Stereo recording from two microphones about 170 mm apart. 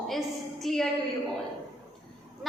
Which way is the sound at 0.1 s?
Centre (ahead or behind).